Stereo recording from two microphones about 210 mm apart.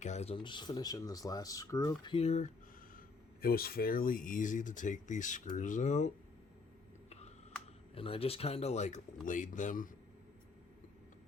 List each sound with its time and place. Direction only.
0.0 s speech: 30° left (ahead or behind)
3.4 s speech: 45° left (ahead or behind)
7.9 s speech: 25° left (ahead or behind)